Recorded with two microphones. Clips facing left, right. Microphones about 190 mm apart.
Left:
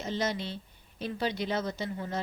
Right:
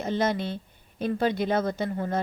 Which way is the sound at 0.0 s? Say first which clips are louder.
Right 6 dB; 55° right (ahead or behind).